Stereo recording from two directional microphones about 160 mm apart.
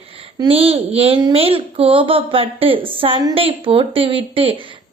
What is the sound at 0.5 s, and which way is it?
A woman's voice, 40° right (ahead or behind).